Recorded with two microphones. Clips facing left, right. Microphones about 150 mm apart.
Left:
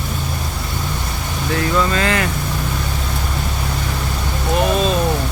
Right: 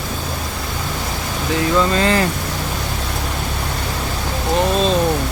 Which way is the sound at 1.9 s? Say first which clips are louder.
Right 2 dB; 30° right (ahead or behind).